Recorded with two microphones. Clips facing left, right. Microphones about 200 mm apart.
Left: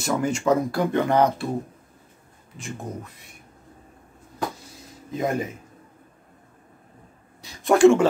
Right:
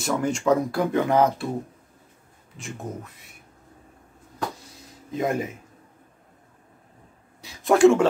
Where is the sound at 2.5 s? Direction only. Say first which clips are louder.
Left 1 dB; centre (ahead or behind).